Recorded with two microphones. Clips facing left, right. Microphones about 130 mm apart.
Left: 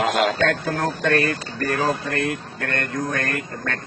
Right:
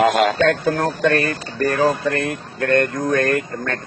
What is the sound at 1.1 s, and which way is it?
Speech, 40° right (ahead or behind).